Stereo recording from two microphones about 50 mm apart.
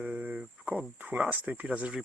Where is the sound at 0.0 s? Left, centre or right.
Right.